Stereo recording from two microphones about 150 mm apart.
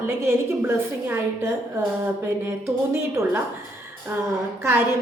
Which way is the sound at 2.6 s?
15° right (ahead or behind).